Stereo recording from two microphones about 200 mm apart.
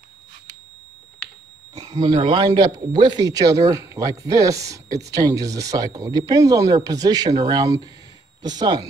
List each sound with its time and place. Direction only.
1.8 s a man's voice: 20° right (ahead or behind)